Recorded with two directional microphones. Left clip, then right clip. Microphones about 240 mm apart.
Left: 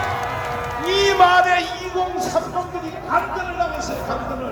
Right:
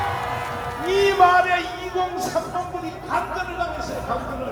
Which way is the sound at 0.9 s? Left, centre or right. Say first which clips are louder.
Left 1 dB; centre.